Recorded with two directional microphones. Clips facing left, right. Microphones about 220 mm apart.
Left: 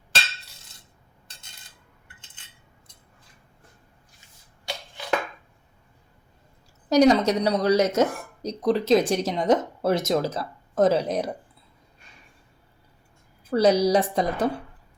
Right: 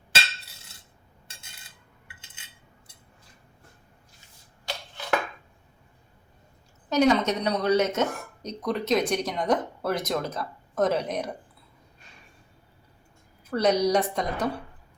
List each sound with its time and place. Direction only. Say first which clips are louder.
6.9 s speech: left 4 dB; 35° left (ahead or behind)
13.5 s a woman's voice: left 3 dB; 30° left (ahead or behind)